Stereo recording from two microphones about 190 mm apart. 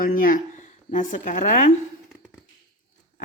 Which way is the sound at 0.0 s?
45° left (ahead or behind).